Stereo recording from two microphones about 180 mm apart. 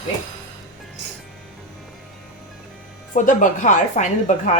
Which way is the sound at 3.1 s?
45° left (ahead or behind).